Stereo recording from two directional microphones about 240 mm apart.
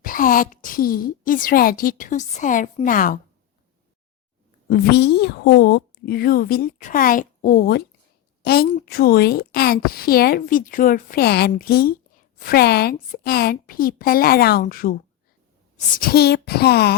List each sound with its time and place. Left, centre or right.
0.0 s a woman's voice: left
4.7 s a woman's voice: left
16.0 s a woman's voice: left